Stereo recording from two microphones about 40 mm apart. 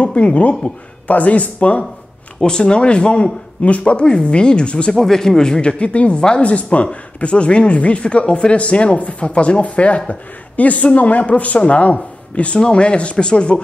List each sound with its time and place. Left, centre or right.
0.0 s speech: left
2.4 s speech: left
4.9 s speech: centre